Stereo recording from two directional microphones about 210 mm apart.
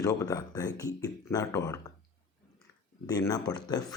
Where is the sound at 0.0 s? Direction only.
15° left (ahead or behind).